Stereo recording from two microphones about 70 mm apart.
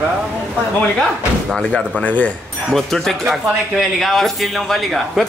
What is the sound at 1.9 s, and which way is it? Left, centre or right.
Speech, left.